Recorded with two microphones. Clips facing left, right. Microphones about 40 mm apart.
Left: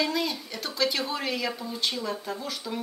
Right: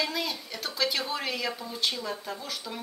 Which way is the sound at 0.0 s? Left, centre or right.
Centre.